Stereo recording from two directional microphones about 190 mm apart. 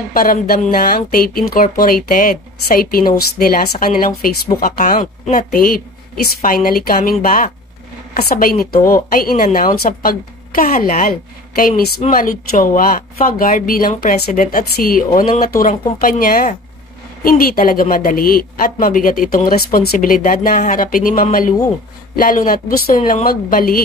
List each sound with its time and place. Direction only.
0.1 s a woman's voice: 50° left (ahead or behind)
5.5 s a woman's voice: 50° left (ahead or behind)